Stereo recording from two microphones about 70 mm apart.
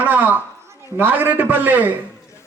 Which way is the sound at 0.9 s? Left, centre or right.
Right.